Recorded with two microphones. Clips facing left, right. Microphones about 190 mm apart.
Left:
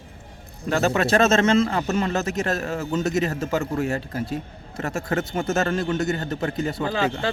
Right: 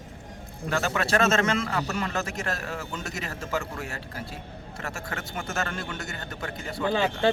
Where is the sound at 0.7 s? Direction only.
25° left (ahead or behind).